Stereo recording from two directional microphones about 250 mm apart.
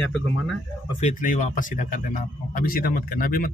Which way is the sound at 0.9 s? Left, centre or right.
Left.